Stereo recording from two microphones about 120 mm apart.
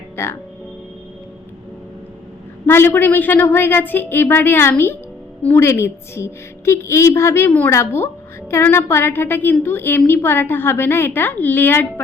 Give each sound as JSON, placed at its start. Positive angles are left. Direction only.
{"t": 0.2, "sound": "a woman's voice", "side_deg": 20}
{"t": 2.6, "sound": "a woman's voice", "side_deg": 20}